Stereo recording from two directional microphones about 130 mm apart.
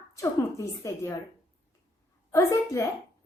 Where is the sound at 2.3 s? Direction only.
25° left (ahead or behind).